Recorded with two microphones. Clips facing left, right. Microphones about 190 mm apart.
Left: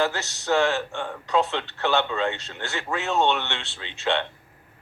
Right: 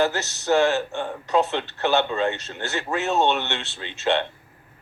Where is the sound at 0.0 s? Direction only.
20° right (ahead or behind).